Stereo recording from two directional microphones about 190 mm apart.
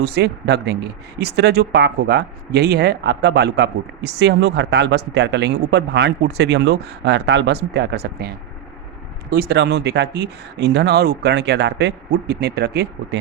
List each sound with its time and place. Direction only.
0.0 s speech: 60° right (ahead or behind)
9.3 s speech: 55° right (ahead or behind)